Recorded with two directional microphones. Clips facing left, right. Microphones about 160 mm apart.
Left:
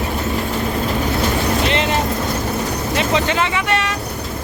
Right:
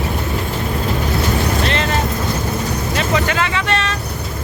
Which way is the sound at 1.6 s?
20° left (ahead or behind).